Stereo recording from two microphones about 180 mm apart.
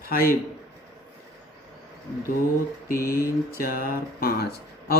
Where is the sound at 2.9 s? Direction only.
55° left (ahead or behind).